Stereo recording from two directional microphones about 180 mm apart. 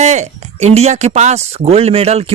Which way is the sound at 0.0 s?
40° right (ahead or behind).